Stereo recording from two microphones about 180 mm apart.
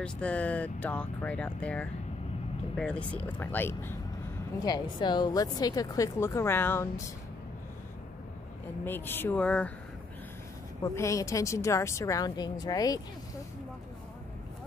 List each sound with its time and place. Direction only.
0.0 s a woman's voice: 5° left (ahead or behind)
4.6 s speech: 25° left (ahead or behind)
8.8 s a woman's voice: 10° left (ahead or behind)
10.8 s a woman's voice: 15° left (ahead or behind)